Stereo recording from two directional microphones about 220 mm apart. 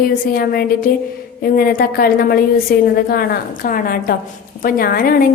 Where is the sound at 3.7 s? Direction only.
40° left (ahead or behind).